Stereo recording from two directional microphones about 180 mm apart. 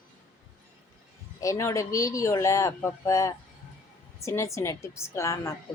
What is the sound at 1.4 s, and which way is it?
A woman's voice, 15° left (ahead or behind).